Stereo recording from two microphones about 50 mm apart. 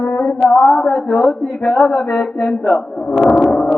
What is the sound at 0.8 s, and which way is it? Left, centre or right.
Speech, centre.